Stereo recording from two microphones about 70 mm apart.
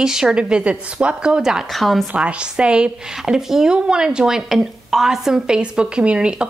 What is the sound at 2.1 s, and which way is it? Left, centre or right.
A woman's voice, centre.